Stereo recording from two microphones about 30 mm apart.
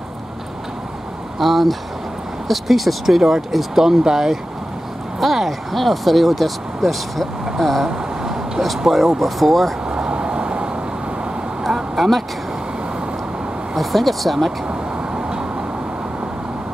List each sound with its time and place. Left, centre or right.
1.4 s speech: centre
5.2 s speech: centre
8.2 s vehicle: centre
8.7 s speech: centre
9.8 s vehicle: right
12.0 s speech: centre
13.7 s speech: centre
14.7 s vehicle: right